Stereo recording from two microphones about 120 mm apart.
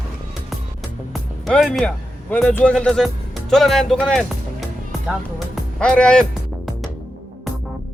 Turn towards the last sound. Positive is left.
turn(degrees=5)  # may be behind; listen again after turning